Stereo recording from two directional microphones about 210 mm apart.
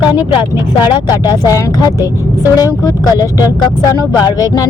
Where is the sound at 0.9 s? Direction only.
20° left (ahead or behind).